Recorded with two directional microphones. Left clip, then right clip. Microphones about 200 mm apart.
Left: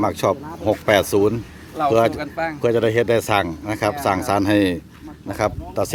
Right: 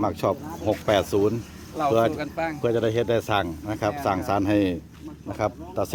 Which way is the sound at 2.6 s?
20° left (ahead or behind).